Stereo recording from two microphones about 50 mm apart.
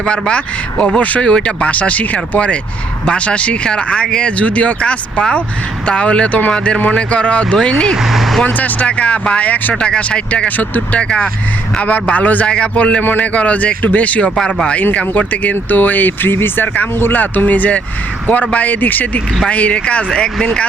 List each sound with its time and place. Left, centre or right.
0.0 s speech: centre
8.1 s speech: centre
8.4 s speech: left
12.5 s speech: left
13.0 s speech: left
14.4 s speech: centre
14.9 s speech: left